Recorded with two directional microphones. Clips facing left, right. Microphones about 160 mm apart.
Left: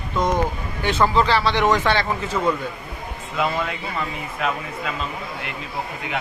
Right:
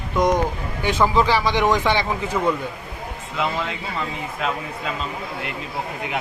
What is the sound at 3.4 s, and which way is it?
A man's voice, 5° left (ahead or behind).